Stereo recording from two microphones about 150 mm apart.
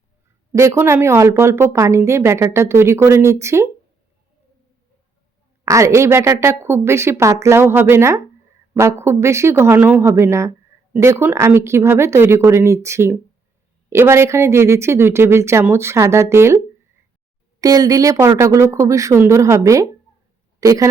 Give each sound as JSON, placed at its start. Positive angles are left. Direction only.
{"t": 0.5, "sound": "speech", "side_deg": -20}
{"t": 5.6, "sound": "speech", "side_deg": -20}
{"t": 17.6, "sound": "a woman's voice", "side_deg": -25}